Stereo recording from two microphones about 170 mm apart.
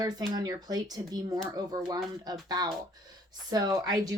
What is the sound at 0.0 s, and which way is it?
Speech, 25° right (ahead or behind).